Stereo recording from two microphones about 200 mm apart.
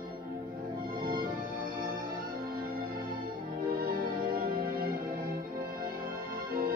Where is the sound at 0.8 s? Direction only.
45° right (ahead or behind).